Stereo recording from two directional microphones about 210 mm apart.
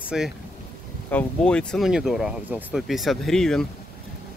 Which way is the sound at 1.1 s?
5° left (ahead or behind).